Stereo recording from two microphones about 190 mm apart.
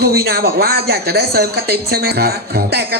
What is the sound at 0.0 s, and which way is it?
Speech, 55° right (ahead or behind).